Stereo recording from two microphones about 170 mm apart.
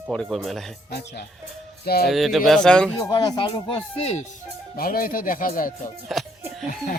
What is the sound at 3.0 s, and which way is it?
Speech, 25° left (ahead or behind).